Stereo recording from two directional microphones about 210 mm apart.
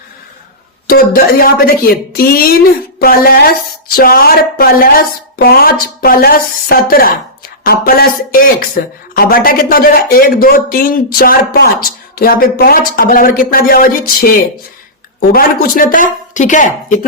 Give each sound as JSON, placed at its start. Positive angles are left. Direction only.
{"t": 0.9, "sound": "speech", "side_deg": 45}